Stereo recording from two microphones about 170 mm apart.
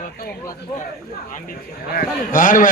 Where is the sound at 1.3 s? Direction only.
55° left (ahead or behind).